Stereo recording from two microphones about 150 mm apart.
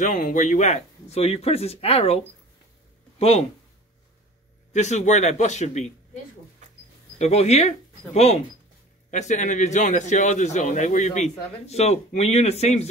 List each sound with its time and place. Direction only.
0.0 s a man's voice: 55° left (ahead or behind); by 3.4 s 40° left (ahead or behind)
4.7 s a man's voice: 50° left (ahead or behind)
6.6 s a sound: 50° right (ahead or behind)
7.2 s a man's voice: 45° left (ahead or behind)